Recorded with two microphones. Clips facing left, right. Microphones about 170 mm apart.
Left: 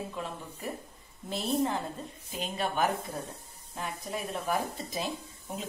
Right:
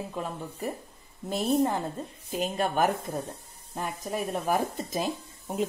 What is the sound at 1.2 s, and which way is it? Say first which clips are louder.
Speech: right 4 dB; 45° right (ahead or behind).